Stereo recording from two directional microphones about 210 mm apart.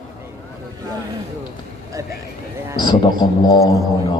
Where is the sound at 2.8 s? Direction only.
20° left (ahead or behind).